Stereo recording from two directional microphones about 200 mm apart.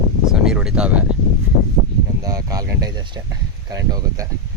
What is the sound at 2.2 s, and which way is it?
Speech, 20° right (ahead or behind).